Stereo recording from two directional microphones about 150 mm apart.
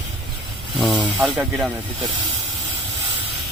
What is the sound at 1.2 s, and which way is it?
Speech, 10° right (ahead or behind).